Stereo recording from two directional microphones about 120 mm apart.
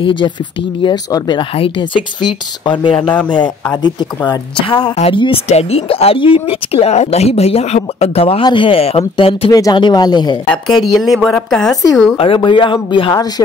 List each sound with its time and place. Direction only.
0.0 s speech: 40° left (ahead or behind)
5.5 s speech: 60° left (ahead or behind)
9.5 s speech: 35° left (ahead or behind)
10.9 s a woman's voice: centre (ahead or behind)
12.4 s speech: 40° left (ahead or behind)